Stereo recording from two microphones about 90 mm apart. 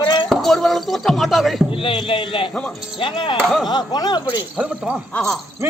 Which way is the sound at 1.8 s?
80° left.